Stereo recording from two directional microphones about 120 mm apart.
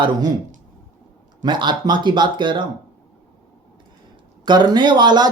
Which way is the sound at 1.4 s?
40° right (ahead or behind).